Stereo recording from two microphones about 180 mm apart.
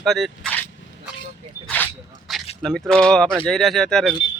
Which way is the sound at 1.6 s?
10° left (ahead or behind).